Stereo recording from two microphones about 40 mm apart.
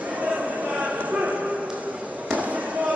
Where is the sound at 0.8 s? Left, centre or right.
Right.